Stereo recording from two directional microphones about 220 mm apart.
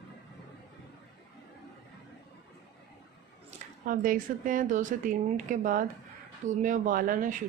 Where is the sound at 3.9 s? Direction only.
40° right (ahead or behind).